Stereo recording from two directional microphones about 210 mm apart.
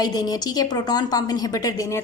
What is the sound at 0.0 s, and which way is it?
A woman's voice, 20° left (ahead or behind).